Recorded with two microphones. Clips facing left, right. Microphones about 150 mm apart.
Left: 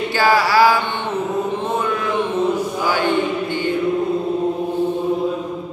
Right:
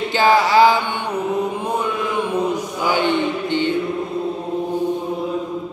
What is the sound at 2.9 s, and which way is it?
Mantra, 20° right (ahead or behind).